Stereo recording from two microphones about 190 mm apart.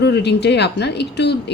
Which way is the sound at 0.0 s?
65° left (ahead or behind).